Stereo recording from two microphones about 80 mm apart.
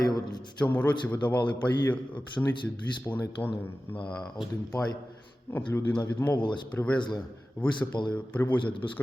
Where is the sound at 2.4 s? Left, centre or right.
Centre.